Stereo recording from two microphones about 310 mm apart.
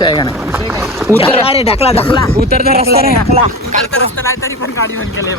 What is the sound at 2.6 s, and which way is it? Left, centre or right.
Speech, right.